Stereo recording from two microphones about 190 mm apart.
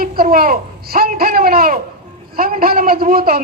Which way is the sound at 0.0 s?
50° right (ahead or behind).